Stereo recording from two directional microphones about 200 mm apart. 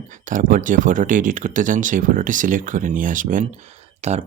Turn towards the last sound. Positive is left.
turn(degrees=-35)  # may be behind; listen again after turning